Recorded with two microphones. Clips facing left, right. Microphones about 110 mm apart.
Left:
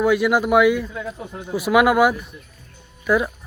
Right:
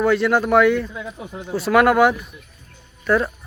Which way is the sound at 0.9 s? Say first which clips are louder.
Left 2 dB; 5° right (ahead or behind).